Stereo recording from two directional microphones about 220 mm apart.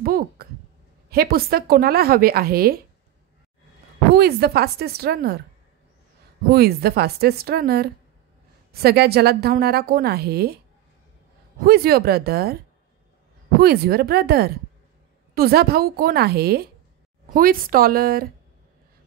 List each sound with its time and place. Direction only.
0.0 s a woman's voice: 40° right (ahead or behind)
4.1 s a woman's voice: 45° right (ahead or behind)
6.5 s a woman's voice: 45° right (ahead or behind)
11.6 s a woman's voice: 45° right (ahead or behind)
13.6 s a woman's voice: 45° right (ahead or behind)